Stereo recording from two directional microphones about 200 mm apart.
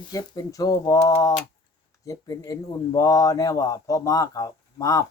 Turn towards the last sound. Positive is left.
turn(degrees=15)  # may be behind; listen again after turning